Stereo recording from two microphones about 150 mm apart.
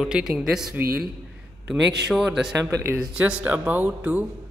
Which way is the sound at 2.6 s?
15° right (ahead or behind).